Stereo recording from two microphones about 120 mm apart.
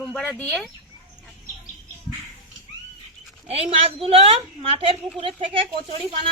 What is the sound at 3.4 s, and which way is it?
A woman's voice, 55° right (ahead or behind).